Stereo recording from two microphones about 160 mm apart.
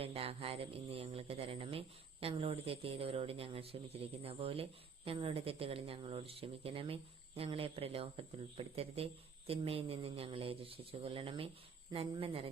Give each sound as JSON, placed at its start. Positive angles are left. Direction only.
{"t": 0.0, "sound": "speech", "side_deg": -35}